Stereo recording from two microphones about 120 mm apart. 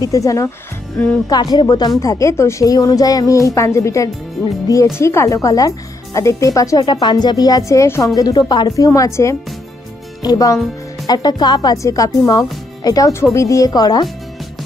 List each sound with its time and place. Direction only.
0.0 s a woman's voice: 30° left (ahead or behind)